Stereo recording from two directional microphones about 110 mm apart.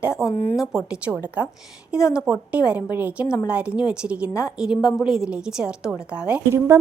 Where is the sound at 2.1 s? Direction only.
10° right (ahead or behind).